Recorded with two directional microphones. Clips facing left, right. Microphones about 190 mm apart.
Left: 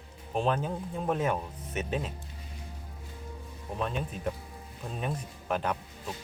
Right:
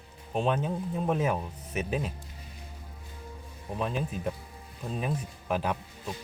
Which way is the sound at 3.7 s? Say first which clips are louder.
Right 2 dB; 5° right (ahead or behind).